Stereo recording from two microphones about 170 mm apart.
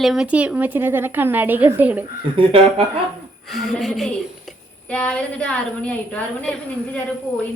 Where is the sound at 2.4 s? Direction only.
30° right (ahead or behind).